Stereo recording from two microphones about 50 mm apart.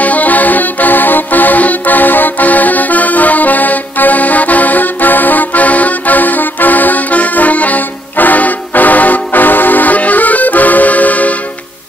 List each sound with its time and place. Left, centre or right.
0.0 s accordion: left